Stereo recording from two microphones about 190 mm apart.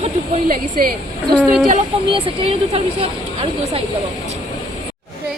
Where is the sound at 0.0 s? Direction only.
45° right (ahead or behind).